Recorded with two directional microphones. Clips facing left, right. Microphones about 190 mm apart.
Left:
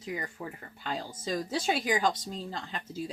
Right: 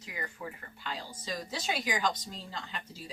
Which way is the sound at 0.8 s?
45° left (ahead or behind).